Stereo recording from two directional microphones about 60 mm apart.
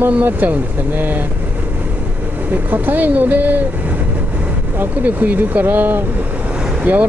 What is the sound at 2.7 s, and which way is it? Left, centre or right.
Speech, right.